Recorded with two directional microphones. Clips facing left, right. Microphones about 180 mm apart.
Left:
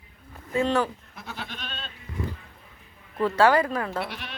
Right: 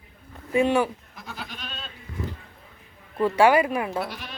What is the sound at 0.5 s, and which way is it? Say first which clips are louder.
Speech: right 3 dB; 15° right (ahead or behind).